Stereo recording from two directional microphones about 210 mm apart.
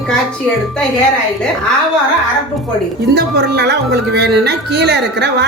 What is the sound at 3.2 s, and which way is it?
A woman's voice, 50° right (ahead or behind).